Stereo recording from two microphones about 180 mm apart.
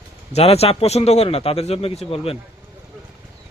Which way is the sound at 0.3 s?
35° left (ahead or behind).